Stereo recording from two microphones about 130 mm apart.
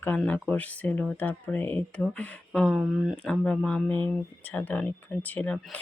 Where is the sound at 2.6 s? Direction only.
5° right (ahead or behind).